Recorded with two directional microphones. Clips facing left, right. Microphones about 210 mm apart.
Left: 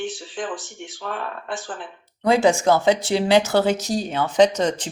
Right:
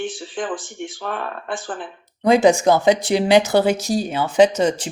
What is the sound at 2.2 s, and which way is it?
Speech, 15° right (ahead or behind).